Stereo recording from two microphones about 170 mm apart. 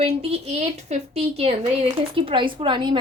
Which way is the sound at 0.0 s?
35° right (ahead or behind).